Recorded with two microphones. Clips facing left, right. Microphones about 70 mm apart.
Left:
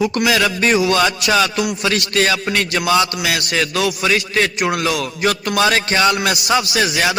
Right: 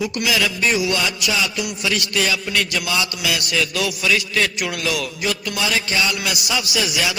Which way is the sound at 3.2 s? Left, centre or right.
Left.